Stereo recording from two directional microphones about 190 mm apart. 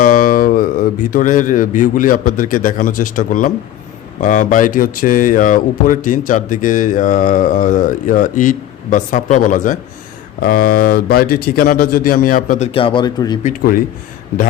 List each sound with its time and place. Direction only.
0.0 s a man's voice: 45° left (ahead or behind); by 13.4 s 20° left (ahead or behind)